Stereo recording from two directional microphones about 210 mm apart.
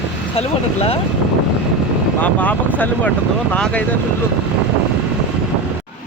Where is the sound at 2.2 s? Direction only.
5° left (ahead or behind).